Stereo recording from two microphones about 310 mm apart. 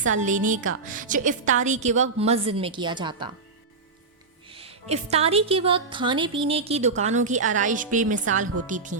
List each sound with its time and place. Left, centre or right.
0.0 s a woman's voice: right
4.4 s a woman's voice: centre